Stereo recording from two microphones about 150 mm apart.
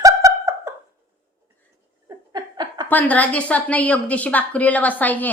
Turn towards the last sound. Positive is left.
turn(degrees=10)  # may be behind; listen again after turning